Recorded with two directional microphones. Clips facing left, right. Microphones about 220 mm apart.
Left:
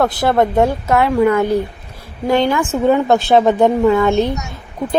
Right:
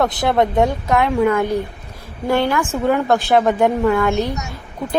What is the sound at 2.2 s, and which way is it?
A woman's voice, 20° left (ahead or behind).